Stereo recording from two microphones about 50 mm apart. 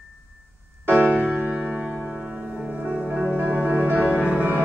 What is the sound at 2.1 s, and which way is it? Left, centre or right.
Music, centre.